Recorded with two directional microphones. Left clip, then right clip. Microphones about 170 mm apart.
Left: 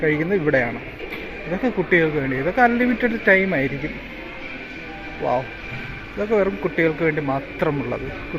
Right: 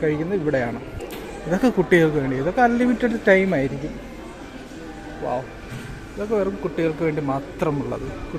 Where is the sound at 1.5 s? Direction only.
35° right (ahead or behind).